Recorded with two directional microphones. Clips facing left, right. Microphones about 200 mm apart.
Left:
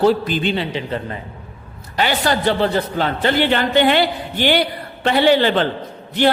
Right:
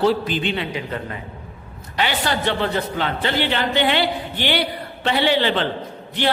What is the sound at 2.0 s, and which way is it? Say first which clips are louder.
A man's voice: left 4 dB; 40° left (ahead or behind).